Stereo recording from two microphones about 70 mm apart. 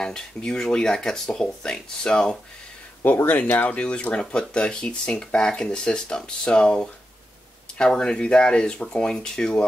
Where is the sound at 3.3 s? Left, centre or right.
Left.